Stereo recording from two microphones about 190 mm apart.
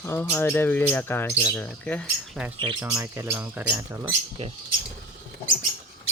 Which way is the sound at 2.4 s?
5° right (ahead or behind).